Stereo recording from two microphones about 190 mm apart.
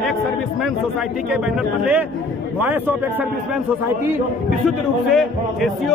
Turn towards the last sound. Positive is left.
turn(degrees=0)  # may be behind; listen again after turning